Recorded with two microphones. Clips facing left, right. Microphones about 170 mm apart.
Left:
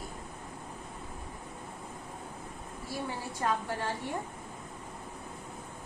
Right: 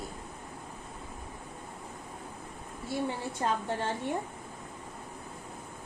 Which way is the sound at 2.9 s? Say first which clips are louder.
Right 4 dB; 25° right (ahead or behind).